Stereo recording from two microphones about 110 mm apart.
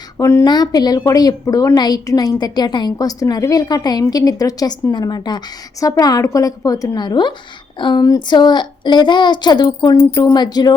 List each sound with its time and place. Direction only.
0.2 s speech: 25° left (ahead or behind)
0.4 s a woman's voice: 40° left (ahead or behind)